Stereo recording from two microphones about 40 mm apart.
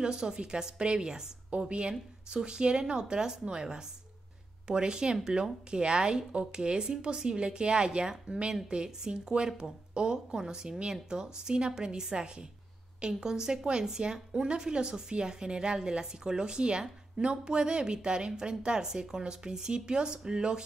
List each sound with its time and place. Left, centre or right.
0.0 s a woman's voice: centre